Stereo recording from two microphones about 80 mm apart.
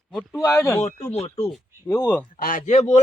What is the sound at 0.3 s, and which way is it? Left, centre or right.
Speech, left.